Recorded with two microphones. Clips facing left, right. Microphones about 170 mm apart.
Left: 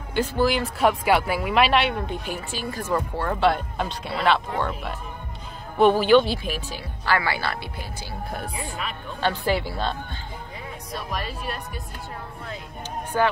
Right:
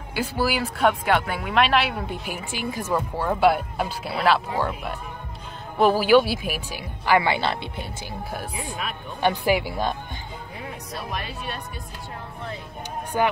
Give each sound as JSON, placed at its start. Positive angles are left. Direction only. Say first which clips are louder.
{"t": 0.1, "sound": "speech", "louder": "left 3 dB", "side_deg": -10}
{"t": 8.3, "sound": "speech", "louder": "left 1 dB", "side_deg": -5}
{"t": 13.1, "sound": "speech", "louder": "even", "side_deg": -15}